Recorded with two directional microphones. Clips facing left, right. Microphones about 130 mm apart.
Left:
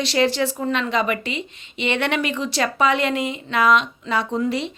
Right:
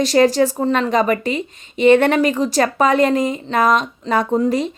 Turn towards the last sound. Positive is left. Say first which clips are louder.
# right 5 dB
turn(degrees=-45)  # may be behind; listen again after turning